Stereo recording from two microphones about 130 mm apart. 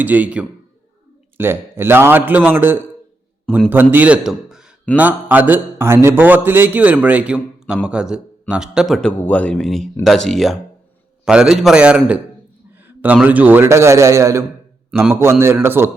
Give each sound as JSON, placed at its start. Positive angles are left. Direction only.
{"t": 0.0, "sound": "a man's voice", "side_deg": -10}
{"t": 12.7, "sound": "a sound", "side_deg": -15}
{"t": 13.2, "sound": "a man's voice", "side_deg": -15}